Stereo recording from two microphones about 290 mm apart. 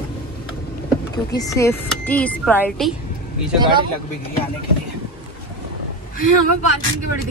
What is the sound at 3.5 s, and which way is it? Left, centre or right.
Speech, centre.